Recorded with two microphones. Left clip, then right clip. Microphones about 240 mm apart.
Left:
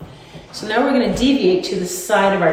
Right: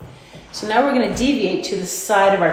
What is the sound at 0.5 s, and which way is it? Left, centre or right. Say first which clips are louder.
Speech: even; right.